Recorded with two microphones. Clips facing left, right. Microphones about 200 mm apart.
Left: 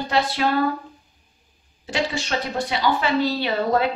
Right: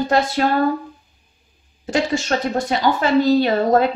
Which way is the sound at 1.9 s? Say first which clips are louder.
Right 5 dB; 45° right (ahead or behind).